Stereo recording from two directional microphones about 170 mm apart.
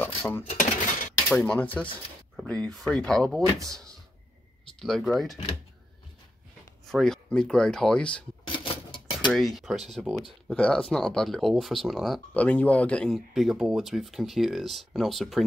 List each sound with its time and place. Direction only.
0.0 s dishes: 10° left (ahead or behind)
0.5 s speech: 50° left (ahead or behind)
1.3 s speech: 5° left (ahead or behind)
4.7 s speech: centre (ahead or behind)
6.9 s speech: centre (ahead or behind)
8.5 s cash register: 30° left (ahead or behind)
9.3 s speech: centre (ahead or behind)